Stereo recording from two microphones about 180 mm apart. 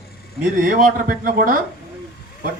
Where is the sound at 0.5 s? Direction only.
50° right (ahead or behind).